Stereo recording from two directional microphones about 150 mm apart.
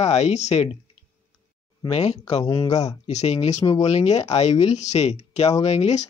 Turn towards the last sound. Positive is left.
turn(degrees=45)  # may be behind; listen again after turning